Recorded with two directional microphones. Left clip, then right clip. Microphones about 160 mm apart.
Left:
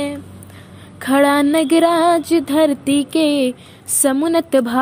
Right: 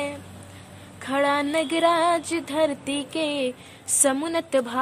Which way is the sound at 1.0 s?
35° left (ahead or behind).